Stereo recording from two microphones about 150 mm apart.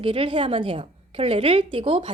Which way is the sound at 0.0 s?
35° right (ahead or behind).